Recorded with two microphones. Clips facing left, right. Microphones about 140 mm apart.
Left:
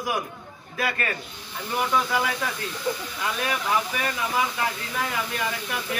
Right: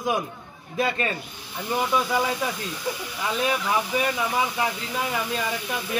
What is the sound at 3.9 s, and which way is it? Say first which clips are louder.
Speech: right 5 dB; 25° right (ahead or behind).